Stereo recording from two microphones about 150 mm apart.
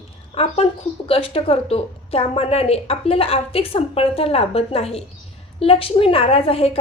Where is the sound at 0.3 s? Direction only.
45° left (ahead or behind).